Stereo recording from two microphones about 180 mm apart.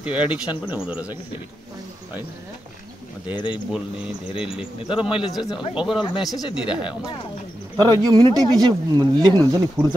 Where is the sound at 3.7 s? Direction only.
5° right (ahead or behind).